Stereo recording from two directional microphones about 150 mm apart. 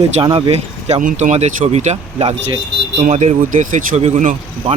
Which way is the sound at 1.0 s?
55° right (ahead or behind).